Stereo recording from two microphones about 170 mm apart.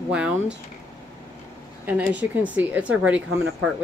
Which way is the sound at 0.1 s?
5° right (ahead or behind).